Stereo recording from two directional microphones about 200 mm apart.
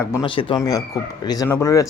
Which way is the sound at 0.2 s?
25° left (ahead or behind).